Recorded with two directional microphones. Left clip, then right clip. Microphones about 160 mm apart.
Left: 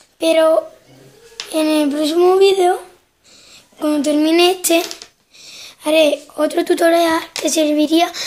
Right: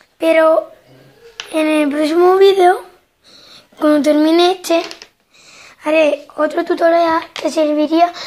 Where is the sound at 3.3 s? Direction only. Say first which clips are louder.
Right 3 dB; 30° right (ahead or behind).